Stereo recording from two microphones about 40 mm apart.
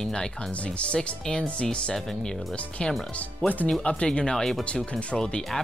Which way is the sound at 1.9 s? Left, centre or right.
Centre.